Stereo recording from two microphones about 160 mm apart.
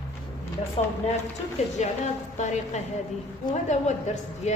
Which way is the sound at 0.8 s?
40° left (ahead or behind).